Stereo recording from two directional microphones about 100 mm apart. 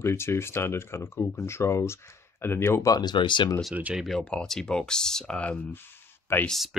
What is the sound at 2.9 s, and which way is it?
Speech, 45° left (ahead or behind).